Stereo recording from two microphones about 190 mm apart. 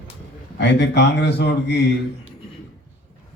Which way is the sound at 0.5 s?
65° left (ahead or behind).